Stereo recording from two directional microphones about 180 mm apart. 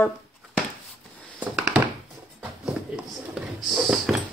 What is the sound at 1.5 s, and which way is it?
Thunk, 5° right (ahead or behind).